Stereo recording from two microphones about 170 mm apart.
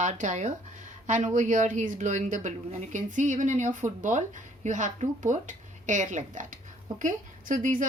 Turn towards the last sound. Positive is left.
turn(degrees=-50)  # may be behind; listen again after turning